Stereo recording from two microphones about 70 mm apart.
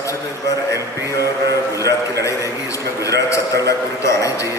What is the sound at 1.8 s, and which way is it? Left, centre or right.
A man's voice, left.